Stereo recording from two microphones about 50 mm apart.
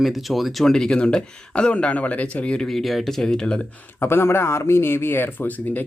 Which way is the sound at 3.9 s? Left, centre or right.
Left.